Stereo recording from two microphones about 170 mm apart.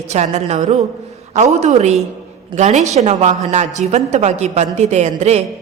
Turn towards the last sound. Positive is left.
turn(degrees=-40)  # may be behind; listen again after turning